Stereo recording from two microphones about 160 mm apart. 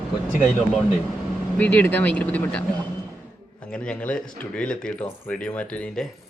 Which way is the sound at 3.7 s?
5° left (ahead or behind).